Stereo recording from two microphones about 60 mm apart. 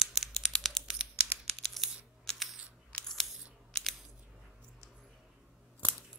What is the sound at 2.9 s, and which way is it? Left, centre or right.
Scissors, centre.